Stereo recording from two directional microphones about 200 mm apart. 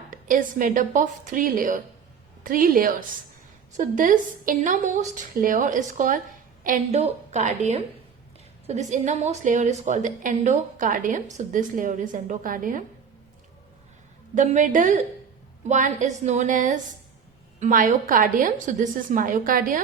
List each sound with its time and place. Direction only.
0.1 s a woman's voice: 40° right (ahead or behind)
14.3 s a woman's voice: 40° right (ahead or behind)